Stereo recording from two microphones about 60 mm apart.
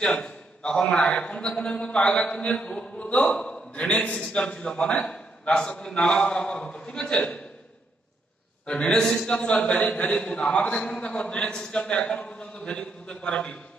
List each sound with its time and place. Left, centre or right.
0.2 s a man's voice: centre
8.6 s a man's voice: centre